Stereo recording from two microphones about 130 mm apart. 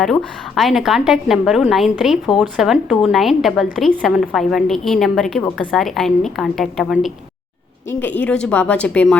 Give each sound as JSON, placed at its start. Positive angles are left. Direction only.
{"t": 0.0, "sound": "a woman's voice", "side_deg": 5}
{"t": 7.9, "sound": "speech", "side_deg": 10}